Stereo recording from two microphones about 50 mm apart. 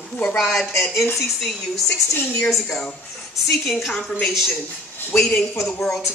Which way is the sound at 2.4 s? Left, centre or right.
Centre.